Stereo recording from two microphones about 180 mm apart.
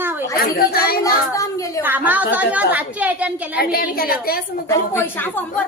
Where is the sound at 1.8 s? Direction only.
10° right (ahead or behind).